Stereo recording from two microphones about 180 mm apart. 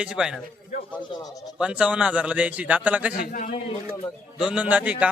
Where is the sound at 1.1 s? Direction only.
20° left (ahead or behind).